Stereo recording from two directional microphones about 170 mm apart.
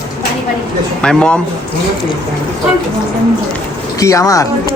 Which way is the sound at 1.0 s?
5° left (ahead or behind).